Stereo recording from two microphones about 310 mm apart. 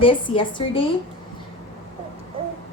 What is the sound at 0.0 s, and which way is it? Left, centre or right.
Speech, centre.